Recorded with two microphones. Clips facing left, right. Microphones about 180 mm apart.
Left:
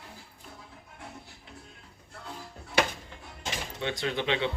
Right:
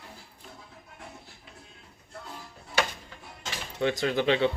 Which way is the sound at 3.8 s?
40° right (ahead or behind).